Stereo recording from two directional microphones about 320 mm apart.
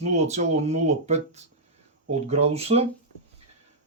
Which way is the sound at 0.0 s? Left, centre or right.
Right.